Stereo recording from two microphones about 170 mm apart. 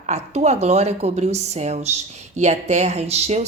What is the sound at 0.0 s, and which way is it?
Speech, 40° right (ahead or behind).